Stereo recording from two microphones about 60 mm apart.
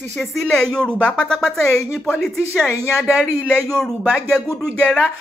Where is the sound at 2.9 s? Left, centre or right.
Centre.